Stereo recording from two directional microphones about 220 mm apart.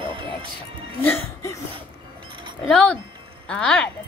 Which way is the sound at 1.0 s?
10° left (ahead or behind).